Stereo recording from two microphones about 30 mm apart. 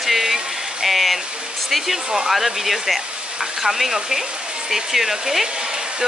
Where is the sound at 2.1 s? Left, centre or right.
Centre.